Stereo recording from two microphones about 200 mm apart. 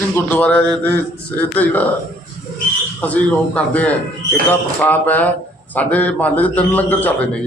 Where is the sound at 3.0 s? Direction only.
5° left (ahead or behind).